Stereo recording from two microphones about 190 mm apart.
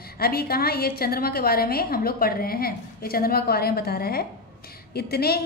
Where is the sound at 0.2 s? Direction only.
55° left (ahead or behind).